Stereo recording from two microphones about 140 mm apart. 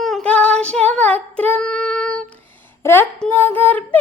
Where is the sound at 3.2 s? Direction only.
15° left (ahead or behind).